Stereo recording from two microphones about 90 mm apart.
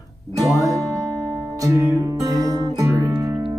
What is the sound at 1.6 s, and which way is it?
Music, 40° right (ahead or behind).